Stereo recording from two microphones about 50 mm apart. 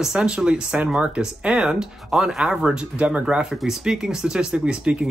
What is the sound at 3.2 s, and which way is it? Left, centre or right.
Speech, centre.